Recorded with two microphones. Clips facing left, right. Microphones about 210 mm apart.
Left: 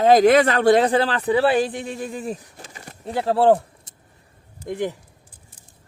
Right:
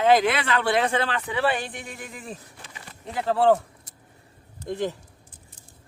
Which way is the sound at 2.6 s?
45° left (ahead or behind).